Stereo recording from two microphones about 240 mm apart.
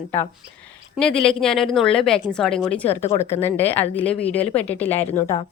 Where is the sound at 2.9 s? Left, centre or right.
Left.